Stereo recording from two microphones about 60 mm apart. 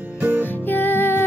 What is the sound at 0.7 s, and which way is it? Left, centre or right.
Music, left.